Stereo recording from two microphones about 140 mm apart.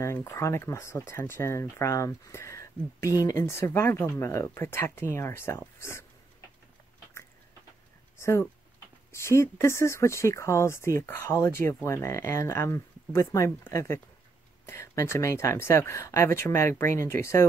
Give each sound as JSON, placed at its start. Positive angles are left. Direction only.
{"t": 0.0, "sound": "speech", "side_deg": 20}
{"t": 8.2, "sound": "speech", "side_deg": 20}